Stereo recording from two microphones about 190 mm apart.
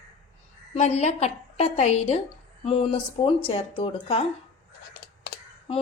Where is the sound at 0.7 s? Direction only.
35° left (ahead or behind).